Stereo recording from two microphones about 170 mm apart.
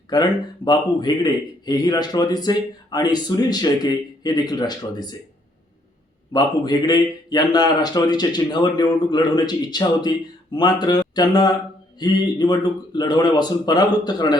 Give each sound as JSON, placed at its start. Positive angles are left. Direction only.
{"t": 0.1, "sound": "a man's voice", "side_deg": 25}
{"t": 6.3, "sound": "a man's voice", "side_deg": 25}